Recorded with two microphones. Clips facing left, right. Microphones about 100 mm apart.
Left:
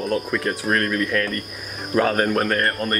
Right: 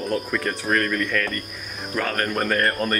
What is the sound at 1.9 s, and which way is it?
Speech, 20° left (ahead or behind).